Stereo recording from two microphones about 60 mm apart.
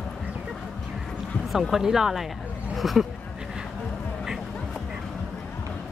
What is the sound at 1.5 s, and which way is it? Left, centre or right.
Speech, centre.